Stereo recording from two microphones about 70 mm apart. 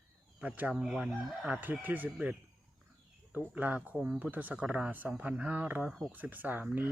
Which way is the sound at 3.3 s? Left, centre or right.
Right.